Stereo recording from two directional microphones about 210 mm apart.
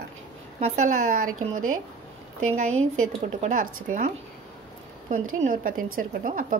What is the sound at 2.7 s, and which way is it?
Speech, 75° right (ahead or behind).